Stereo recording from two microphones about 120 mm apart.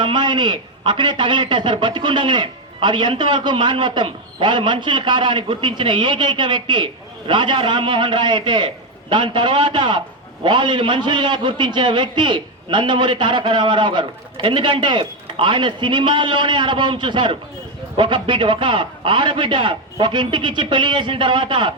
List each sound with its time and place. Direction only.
0.0 s a man's voice: 40° right (ahead or behind)